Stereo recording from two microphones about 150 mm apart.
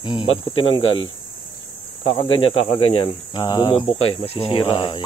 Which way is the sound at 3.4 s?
30° left (ahead or behind).